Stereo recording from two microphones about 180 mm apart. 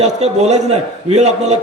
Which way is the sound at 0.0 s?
40° right (ahead or behind).